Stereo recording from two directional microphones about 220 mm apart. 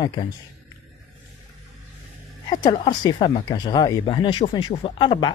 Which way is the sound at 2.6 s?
20° left (ahead or behind).